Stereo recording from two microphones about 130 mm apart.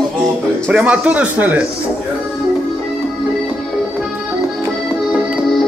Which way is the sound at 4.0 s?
10° right (ahead or behind).